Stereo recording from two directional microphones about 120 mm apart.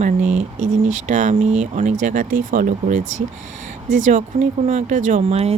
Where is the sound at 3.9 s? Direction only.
90° right; by 5.5 s 60° right (ahead or behind).